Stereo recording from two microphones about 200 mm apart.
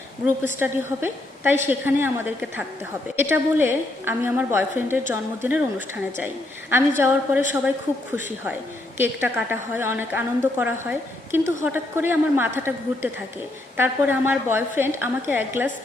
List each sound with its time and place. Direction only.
0.6 s a woman's voice: 10° right (ahead or behind)
6.7 s a woman's voice: 10° right (ahead or behind)